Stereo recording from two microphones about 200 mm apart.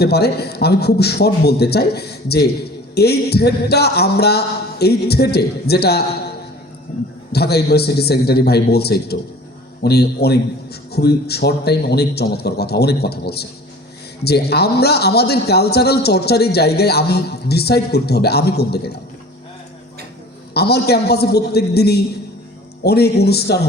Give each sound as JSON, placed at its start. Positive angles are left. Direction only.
{"t": 0.0, "sound": "a man's voice", "side_deg": 55}
{"t": 7.3, "sound": "a man's voice", "side_deg": 55}
{"t": 20.5, "sound": "a man's voice", "side_deg": 55}